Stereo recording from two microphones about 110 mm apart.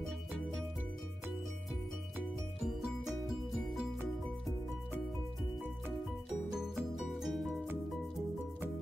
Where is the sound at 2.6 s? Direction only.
5° right (ahead or behind).